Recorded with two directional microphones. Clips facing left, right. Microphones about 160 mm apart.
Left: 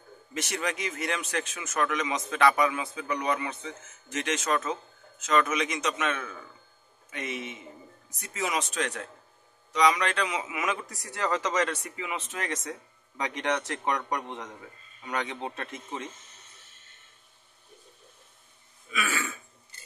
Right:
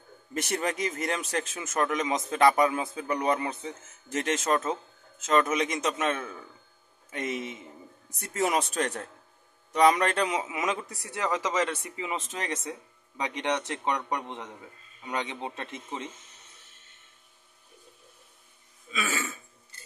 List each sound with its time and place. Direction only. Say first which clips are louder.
0.3 s a man's voice: right 2 dB; 40° right (ahead or behind)
11.1 s speech: even; 15° right (ahead or behind)
13.2 s speech: even; 20° right (ahead or behind)
18.9 s throat clearing: even; 30° right (ahead or behind)